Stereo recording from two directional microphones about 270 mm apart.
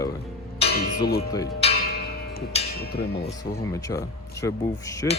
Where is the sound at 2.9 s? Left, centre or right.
Left.